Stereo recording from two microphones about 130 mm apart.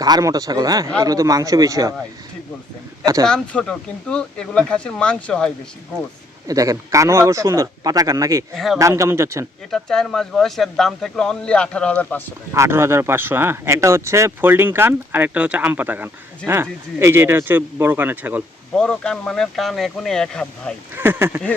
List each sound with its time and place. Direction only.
0.0 s speech: 30° right (ahead or behind)
3.2 s speech: 10° left (ahead or behind)
6.5 s speech: 25° right (ahead or behind)
8.5 s speech: centre (ahead or behind)
8.8 s speech: 20° right (ahead or behind)
9.7 s speech: 5° left (ahead or behind)
12.5 s speech: 20° right (ahead or behind)
18.8 s speech: 5° left (ahead or behind)
20.9 s speech: 15° right (ahead or behind)